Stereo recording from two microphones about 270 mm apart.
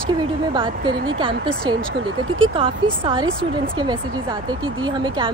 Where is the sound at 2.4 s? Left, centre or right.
Centre.